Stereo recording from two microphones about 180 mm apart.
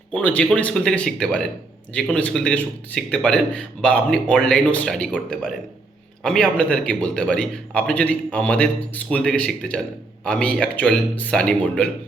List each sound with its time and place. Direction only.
0.1 s a man's voice: 10° left (ahead or behind)